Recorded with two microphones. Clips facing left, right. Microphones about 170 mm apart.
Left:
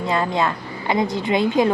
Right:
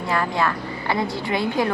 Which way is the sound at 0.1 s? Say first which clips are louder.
Left 1 dB; 20° left (ahead or behind).